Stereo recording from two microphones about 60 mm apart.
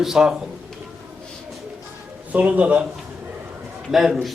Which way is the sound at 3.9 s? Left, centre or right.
Centre.